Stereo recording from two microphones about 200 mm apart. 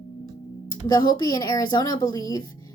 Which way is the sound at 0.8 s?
20° left (ahead or behind).